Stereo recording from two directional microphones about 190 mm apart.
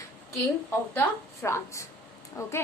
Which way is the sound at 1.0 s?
15° left (ahead or behind).